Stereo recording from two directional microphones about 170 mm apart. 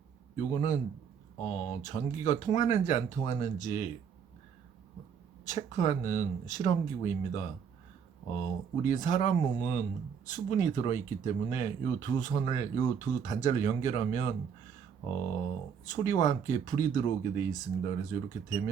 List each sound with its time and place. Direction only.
0.3 s speech: 50° left (ahead or behind)
5.5 s speech: 45° left (ahead or behind)
15.9 s speech: 45° left (ahead or behind)